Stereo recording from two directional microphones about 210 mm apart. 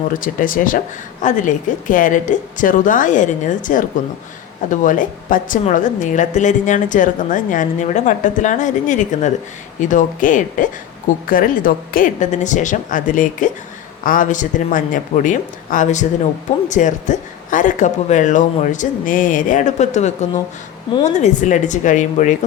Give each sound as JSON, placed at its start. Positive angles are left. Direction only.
{"t": 0.1, "sound": "a woman's voice", "side_deg": 40}